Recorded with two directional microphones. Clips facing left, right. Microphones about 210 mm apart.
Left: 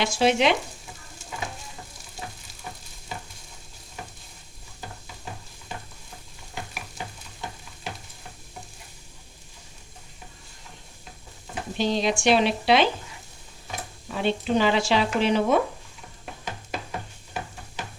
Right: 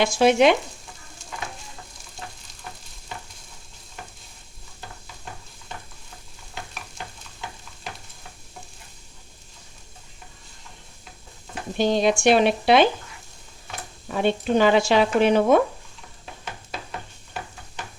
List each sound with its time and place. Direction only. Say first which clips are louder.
0.0 s speech: right 5 dB; 50° right (ahead or behind)
11.8 s speech: right 4 dB; 50° right (ahead or behind)
14.1 s speech: right 3 dB; 50° right (ahead or behind)